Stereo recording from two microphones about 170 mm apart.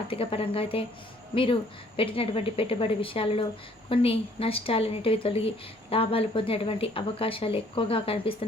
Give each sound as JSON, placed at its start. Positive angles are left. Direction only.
{"t": 0.1, "sound": "speech", "side_deg": 35}
{"t": 2.0, "sound": "speech", "side_deg": 30}